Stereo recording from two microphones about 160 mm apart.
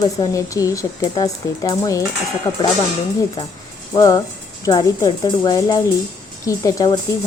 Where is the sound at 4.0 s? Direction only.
20° left (ahead or behind).